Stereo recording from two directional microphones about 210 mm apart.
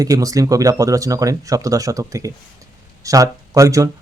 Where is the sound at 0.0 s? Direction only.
15° right (ahead or behind).